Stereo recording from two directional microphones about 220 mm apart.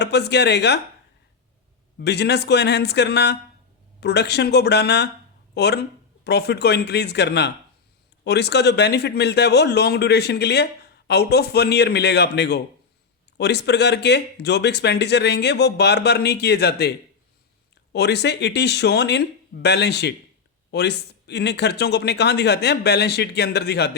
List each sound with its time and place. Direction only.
0.0 s speech: 50° left (ahead or behind)
2.0 s speech: 50° left (ahead or behind)
17.9 s speech: 50° left (ahead or behind)